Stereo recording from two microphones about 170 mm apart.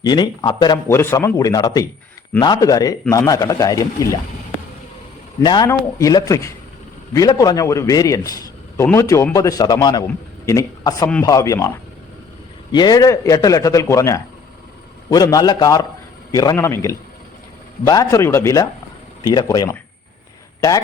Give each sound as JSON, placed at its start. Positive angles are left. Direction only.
{"t": 0.0, "sound": "a man's voice", "side_deg": 25}
{"t": 0.9, "sound": "a man's voice", "side_deg": 15}
{"t": 5.4, "sound": "a man's voice", "side_deg": 25}
{"t": 12.7, "sound": "a man's voice", "side_deg": 25}